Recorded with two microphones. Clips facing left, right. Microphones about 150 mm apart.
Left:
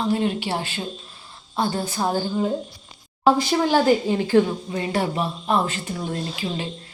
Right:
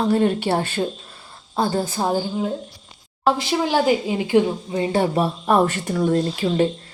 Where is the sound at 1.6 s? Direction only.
30° right (ahead or behind).